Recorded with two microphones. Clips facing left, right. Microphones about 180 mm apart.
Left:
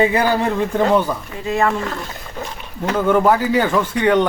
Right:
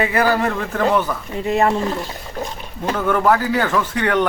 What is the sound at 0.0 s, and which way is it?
A man's voice, 20° left (ahead or behind).